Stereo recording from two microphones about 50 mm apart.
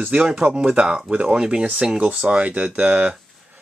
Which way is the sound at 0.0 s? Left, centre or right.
Right.